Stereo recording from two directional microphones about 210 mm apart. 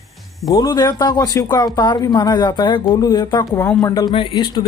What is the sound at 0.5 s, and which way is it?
A man's voice, 15° left (ahead or behind).